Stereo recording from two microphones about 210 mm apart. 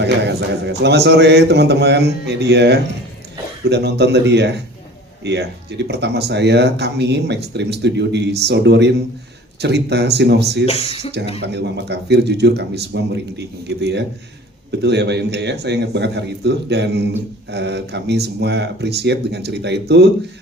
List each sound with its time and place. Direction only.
0.0 s speech: 55° right (ahead or behind)
10.7 s speech: 30° left (ahead or behind)
11.5 s speech: 55° right (ahead or behind)